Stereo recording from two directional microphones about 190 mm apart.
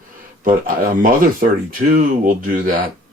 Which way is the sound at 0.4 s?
45° right (ahead or behind).